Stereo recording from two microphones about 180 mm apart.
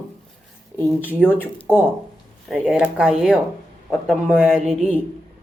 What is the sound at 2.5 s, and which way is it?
A woman's voice, 5° right (ahead or behind).